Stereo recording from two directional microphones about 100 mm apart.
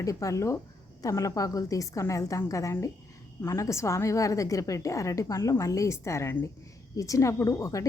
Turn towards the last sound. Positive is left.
turn(degrees=30)  # may be behind; listen again after turning